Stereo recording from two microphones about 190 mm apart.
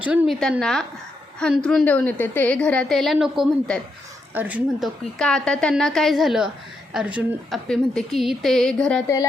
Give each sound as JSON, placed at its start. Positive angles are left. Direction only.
{"t": 0.0, "sound": "a woman's voice", "side_deg": -5}
{"t": 5.1, "sound": "a woman's voice", "side_deg": 5}